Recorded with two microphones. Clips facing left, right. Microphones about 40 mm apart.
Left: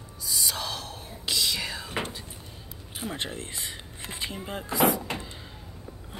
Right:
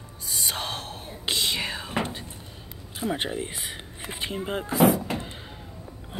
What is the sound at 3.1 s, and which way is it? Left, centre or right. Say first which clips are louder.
Speech: right 5 dB; centre.